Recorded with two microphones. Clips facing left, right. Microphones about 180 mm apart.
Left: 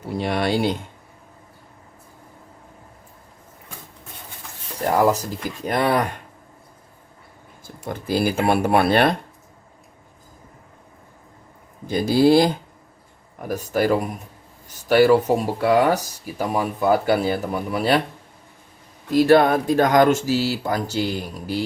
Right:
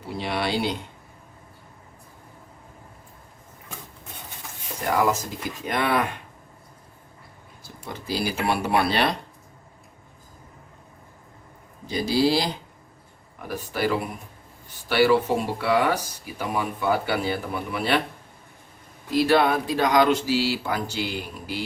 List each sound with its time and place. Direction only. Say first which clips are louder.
0.2 s speech: left 4 dB; 45° left (ahead or behind)
4.9 s speech: left 5 dB; 35° left (ahead or behind)
7.6 s speech: left 6 dB; 50° left (ahead or behind)
11.9 s speech: left 6 dB; 50° left (ahead or behind)
19.1 s speech: left 5 dB; 45° left (ahead or behind)